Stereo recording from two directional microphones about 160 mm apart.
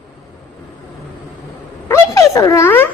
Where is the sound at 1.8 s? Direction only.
20° left (ahead or behind).